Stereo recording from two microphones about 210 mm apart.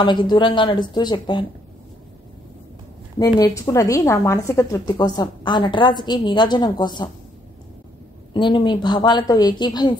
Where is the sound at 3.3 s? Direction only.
15° left (ahead or behind).